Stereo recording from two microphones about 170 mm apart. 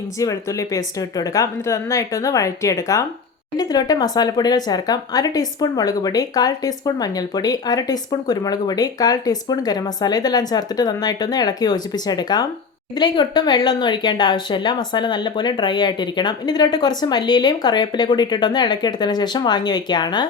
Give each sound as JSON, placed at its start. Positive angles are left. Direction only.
{"t": 0.2, "sound": "speech", "side_deg": 20}